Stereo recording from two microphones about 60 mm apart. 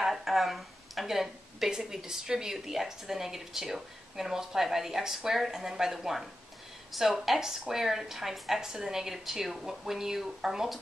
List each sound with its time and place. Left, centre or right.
0.0 s speech: centre